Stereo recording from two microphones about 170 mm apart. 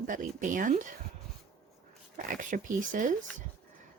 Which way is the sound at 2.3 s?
50° right (ahead or behind).